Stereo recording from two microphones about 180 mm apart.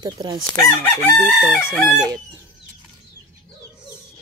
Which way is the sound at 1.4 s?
10° left (ahead or behind).